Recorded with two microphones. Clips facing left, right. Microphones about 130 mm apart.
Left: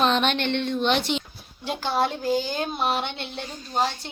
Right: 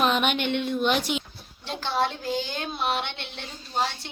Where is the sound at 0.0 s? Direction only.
10° right (ahead or behind).